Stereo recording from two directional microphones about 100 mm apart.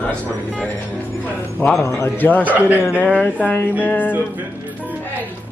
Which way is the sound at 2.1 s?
20° left (ahead or behind).